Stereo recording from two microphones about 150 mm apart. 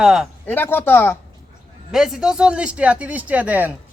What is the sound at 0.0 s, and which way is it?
Speech, 5° right (ahead or behind).